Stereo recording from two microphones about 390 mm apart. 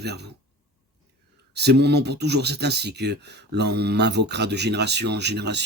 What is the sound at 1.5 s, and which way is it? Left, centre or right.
Speech, right.